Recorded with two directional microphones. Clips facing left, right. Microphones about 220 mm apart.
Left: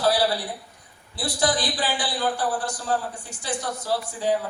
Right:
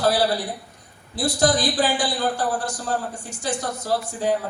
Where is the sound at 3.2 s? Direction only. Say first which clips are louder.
Right 3 dB; 45° right (ahead or behind).